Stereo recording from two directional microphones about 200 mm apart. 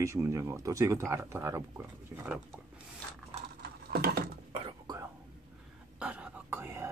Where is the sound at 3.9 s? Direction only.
50° right (ahead or behind).